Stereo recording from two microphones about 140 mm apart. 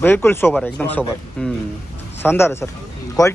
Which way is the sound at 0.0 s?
15° left (ahead or behind).